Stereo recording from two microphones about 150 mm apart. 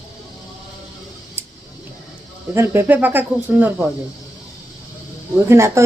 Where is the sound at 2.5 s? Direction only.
15° right (ahead or behind).